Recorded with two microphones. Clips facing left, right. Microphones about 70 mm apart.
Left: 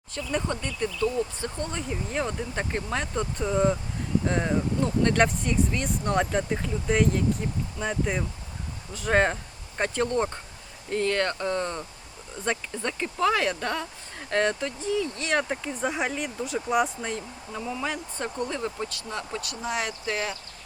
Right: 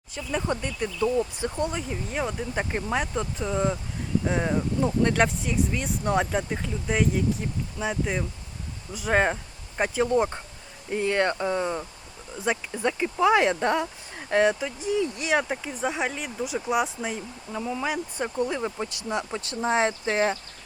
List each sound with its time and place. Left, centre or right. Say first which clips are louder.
0.1 s speech: right 1 dB; centre
1.9 s speech: even; centre; by 13.8 s right
14.2 s speech: right 3 dB; centre; by 20.3 s right